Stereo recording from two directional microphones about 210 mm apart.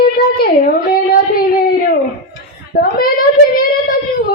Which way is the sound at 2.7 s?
45° left (ahead or behind).